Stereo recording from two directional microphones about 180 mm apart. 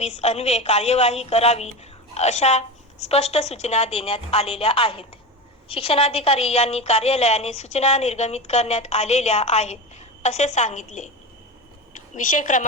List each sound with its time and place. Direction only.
0.0 s a woman's voice: 35° left (ahead or behind)
12.1 s a woman's voice: 45° left (ahead or behind)